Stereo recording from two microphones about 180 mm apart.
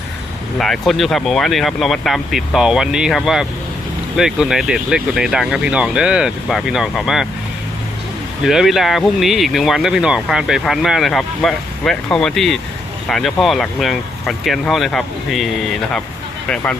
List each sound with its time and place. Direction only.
0.6 s speech: centre (ahead or behind)
8.4 s speech: centre (ahead or behind)